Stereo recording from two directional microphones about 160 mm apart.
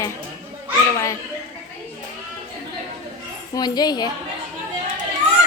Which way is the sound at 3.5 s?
25° left (ahead or behind).